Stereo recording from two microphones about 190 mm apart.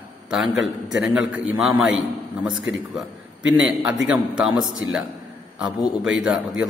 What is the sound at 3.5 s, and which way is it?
A man's voice, 5° right (ahead or behind).